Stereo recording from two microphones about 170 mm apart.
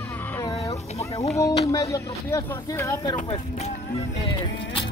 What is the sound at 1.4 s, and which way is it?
Speech, 20° left (ahead or behind).